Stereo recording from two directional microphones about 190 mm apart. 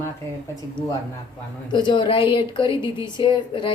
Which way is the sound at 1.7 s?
25° left (ahead or behind).